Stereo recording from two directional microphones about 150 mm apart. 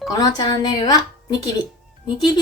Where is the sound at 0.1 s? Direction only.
25° left (ahead or behind).